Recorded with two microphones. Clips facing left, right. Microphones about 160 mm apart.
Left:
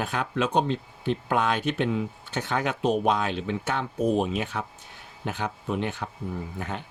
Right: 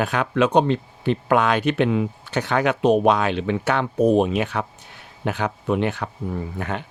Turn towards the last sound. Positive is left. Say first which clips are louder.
# right 6 dB
turn(degrees=-75)  # may be behind; listen again after turning